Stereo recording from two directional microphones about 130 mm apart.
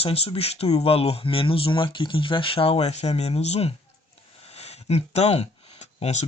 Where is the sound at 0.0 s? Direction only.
50° left (ahead or behind).